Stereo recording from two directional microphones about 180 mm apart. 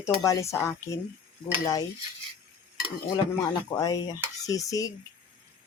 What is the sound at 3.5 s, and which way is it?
Cutlery, 20° left (ahead or behind).